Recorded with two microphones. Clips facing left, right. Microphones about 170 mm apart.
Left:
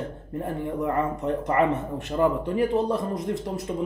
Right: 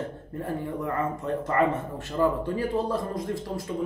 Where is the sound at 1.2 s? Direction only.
20° left (ahead or behind).